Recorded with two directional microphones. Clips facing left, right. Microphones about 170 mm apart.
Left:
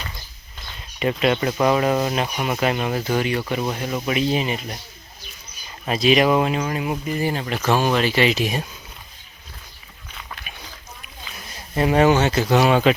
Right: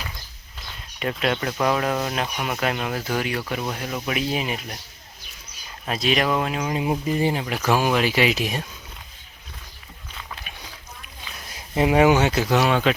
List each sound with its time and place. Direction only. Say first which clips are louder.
0.6 s speech: left 5 dB; centre (ahead or behind)
6.7 s speech: right 1 dB; 20° right (ahead or behind)
7.4 s speech: left 1 dB; 5° right (ahead or behind)
11.7 s speech: even; 15° right (ahead or behind); by 12.9 s 5° left (ahead or behind)